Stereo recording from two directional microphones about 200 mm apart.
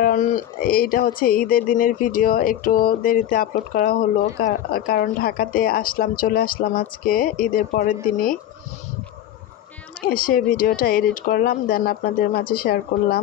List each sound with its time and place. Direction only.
0.0 s speech: 45° left (ahead or behind)
10.0 s speech: 45° left (ahead or behind)